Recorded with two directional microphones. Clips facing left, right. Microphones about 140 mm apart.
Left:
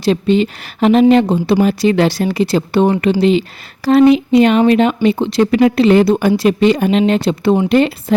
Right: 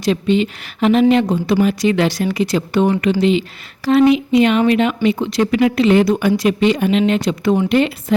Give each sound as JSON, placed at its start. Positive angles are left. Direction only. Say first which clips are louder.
{"t": 0.0, "sound": "speech", "louder": "left 3 dB", "side_deg": 35}